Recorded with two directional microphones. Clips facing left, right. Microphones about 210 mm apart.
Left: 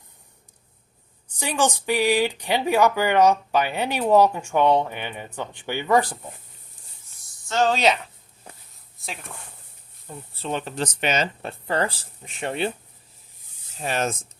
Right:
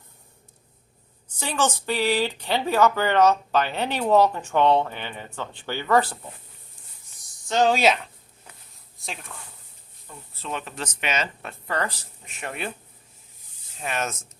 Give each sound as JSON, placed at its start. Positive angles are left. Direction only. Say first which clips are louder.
{"t": 1.4, "sound": "speech", "louder": "left 2 dB", "side_deg": 15}
{"t": 7.4, "sound": "speech", "louder": "right 1 dB", "side_deg": -15}
{"t": 10.1, "sound": "speech", "louder": "left 5 dB", "side_deg": 30}
{"t": 13.7, "sound": "speech", "louder": "left 4 dB", "side_deg": 35}